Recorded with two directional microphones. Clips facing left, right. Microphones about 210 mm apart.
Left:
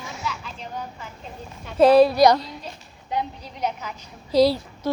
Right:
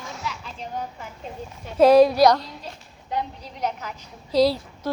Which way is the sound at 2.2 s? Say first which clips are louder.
Left 1 dB; centre (ahead or behind).